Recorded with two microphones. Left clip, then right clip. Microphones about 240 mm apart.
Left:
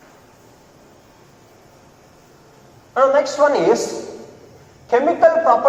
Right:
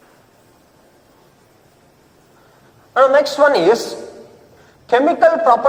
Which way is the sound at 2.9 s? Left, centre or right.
Right.